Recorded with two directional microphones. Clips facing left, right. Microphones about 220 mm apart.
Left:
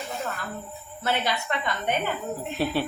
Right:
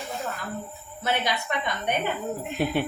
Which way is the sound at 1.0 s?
15° right (ahead or behind).